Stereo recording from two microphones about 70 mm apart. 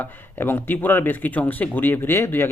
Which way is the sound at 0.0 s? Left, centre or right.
Left.